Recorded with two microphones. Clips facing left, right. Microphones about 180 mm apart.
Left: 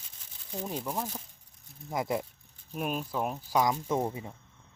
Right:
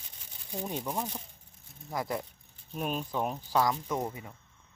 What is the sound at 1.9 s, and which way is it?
Speech, 20° left (ahead or behind).